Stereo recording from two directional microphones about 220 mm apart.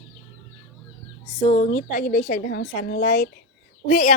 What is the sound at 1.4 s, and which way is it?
A woman's voice, 25° left (ahead or behind).